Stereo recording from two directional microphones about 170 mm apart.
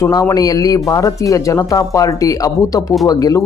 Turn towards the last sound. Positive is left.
turn(degrees=20)  # may be behind; listen again after turning